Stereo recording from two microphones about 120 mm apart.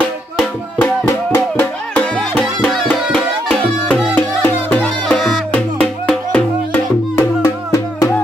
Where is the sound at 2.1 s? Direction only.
Centre (ahead or behind).